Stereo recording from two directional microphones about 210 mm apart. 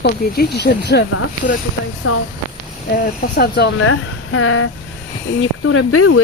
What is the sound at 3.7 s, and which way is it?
Speech, 80° left.